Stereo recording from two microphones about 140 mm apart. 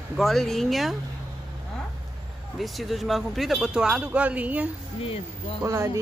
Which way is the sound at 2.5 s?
Centre (ahead or behind).